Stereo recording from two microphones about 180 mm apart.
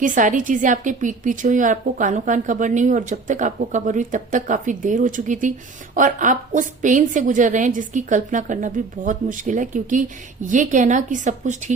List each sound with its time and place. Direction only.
0.0 s a woman's voice: 45° right (ahead or behind)